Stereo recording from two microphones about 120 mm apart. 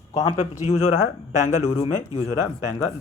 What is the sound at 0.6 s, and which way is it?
Speech, 70° left (ahead or behind).